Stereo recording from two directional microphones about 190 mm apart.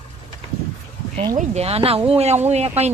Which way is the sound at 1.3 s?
35° right (ahead or behind).